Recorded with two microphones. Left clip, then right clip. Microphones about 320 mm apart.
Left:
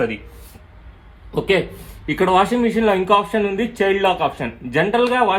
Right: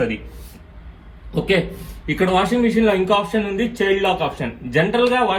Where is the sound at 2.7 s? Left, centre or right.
Centre.